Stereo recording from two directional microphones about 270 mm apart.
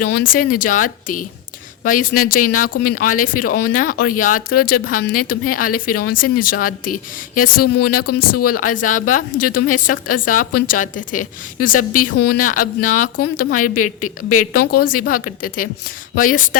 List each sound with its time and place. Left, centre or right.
0.1 s a woman's voice: left
7.6 s speech: left
8.1 s a woman's voice: left
14.3 s speech: left
14.7 s speech: left